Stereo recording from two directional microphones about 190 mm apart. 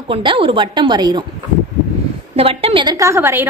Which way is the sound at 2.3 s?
30° right (ahead or behind).